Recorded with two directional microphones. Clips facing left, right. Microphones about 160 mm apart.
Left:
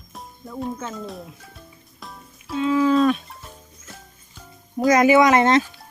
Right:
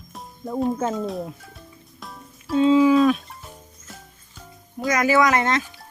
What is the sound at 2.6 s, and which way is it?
Speech, 20° right (ahead or behind).